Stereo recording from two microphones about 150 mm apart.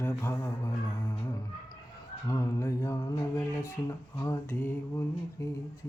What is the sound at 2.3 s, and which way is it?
Mantra, 20° left (ahead or behind).